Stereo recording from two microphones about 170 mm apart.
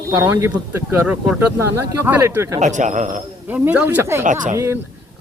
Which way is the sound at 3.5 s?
10° right (ahead or behind).